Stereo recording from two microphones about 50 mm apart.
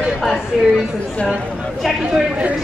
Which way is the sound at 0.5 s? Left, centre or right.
Centre.